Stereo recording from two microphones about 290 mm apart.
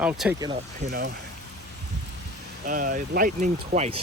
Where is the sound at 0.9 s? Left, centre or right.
Right.